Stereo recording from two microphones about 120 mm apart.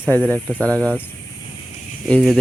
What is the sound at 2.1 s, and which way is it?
Speech, 10° left (ahead or behind).